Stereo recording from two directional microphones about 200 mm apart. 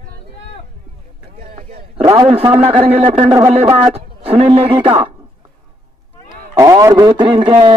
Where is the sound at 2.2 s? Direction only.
30° right (ahead or behind).